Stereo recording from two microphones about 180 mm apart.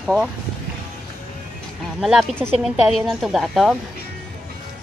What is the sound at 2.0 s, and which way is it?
A woman's voice, centre (ahead or behind).